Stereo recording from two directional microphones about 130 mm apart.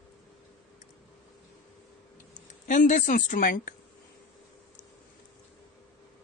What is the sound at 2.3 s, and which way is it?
Speech, 80° left.